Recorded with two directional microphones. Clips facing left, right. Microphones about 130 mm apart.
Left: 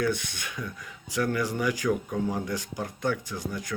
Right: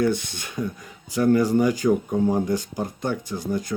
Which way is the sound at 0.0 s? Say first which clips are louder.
Right 5 dB; 30° right (ahead or behind).